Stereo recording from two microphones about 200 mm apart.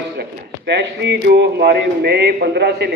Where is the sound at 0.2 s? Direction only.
55° right (ahead or behind).